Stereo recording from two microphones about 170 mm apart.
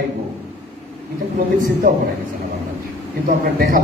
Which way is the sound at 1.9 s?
50° right (ahead or behind).